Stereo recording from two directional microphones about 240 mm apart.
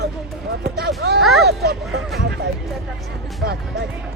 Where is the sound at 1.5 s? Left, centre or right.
Right.